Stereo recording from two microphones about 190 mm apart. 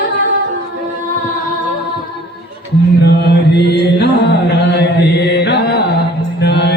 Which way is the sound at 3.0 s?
60° left (ahead or behind).